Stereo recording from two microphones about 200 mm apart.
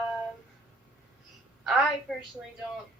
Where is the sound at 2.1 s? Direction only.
Centre (ahead or behind).